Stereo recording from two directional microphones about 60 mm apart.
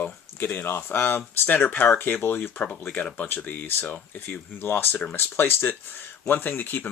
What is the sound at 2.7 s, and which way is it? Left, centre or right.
Speech, left.